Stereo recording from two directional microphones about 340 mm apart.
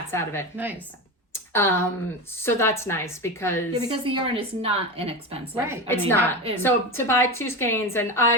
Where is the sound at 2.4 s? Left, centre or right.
Centre.